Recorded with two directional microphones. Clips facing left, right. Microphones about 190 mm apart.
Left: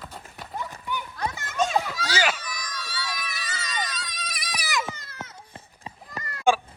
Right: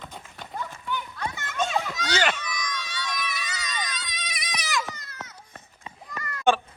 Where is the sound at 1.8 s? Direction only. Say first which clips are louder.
Even; 5° left (ahead or behind).